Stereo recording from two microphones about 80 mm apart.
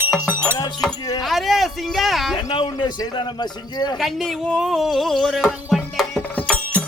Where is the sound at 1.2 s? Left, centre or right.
Centre.